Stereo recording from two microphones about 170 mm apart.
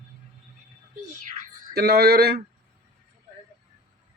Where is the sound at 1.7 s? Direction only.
65° right (ahead or behind).